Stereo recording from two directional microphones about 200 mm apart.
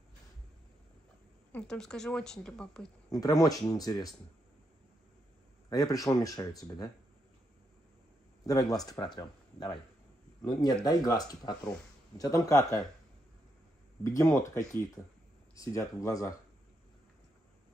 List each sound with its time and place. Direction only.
1.5 s a woman's voice: 5° left (ahead or behind)
3.1 s speech: 20° left (ahead or behind)
5.7 s speech: 20° left (ahead or behind)
8.5 s speech: 20° left (ahead or behind)
14.0 s speech: 15° left (ahead or behind)